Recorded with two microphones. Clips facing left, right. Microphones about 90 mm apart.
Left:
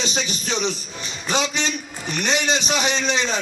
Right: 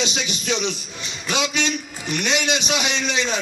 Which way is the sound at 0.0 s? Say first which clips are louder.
Even; 40° left (ahead or behind).